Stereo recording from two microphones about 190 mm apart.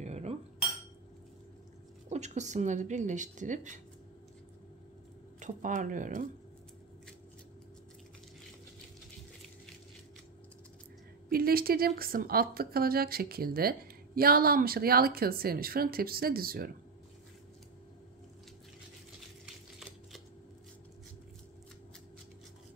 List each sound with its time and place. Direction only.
0.0 s cutlery: 35° right (ahead or behind)
2.0 s speech: 35° right (ahead or behind)
5.4 s a woman's voice: 40° right (ahead or behind)
11.2 s a woman's voice: 50° right (ahead or behind)
19.4 s typewriter: centre (ahead or behind)